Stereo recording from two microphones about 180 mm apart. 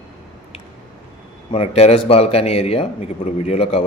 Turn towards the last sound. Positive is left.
turn(degrees=35)  # may be behind; listen again after turning